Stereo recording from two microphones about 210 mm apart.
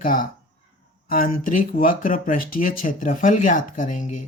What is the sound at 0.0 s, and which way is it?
Speech, 40° left (ahead or behind).